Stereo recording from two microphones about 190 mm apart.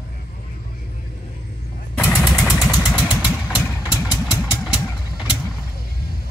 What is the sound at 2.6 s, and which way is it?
Vehicle, centre (ahead or behind).